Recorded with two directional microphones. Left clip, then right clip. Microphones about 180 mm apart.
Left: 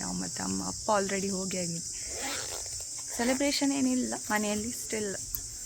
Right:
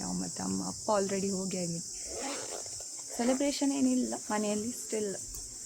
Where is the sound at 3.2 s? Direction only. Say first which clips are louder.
Left 2 dB; 5° left (ahead or behind).